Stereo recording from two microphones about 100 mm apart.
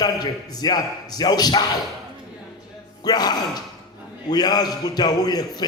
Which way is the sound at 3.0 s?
40° left (ahead or behind).